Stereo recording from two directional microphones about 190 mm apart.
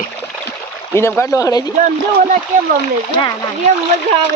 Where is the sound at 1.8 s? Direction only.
40° right (ahead or behind).